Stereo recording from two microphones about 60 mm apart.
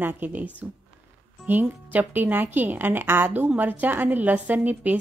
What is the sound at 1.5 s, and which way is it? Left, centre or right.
A woman's voice, right.